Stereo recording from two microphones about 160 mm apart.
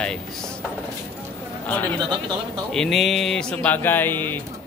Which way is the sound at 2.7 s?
Centre (ahead or behind).